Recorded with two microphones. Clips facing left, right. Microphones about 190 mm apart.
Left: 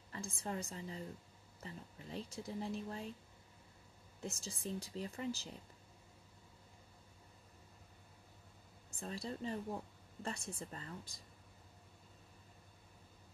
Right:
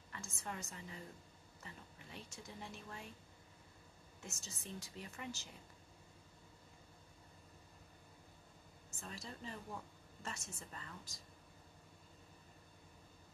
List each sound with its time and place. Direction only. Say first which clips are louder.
0.1 s a woman's voice: left 5 dB; 30° left (ahead or behind)
4.2 s a woman's voice: left 8 dB; 35° left (ahead or behind)
9.0 s a woman's voice: left 7 dB; 35° left (ahead or behind)